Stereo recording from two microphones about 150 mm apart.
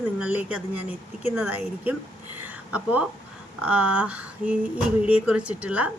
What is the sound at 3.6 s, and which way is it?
A woman's voice, 10° right (ahead or behind).